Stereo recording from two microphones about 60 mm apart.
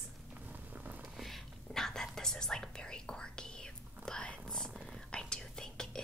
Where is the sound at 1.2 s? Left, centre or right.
Centre.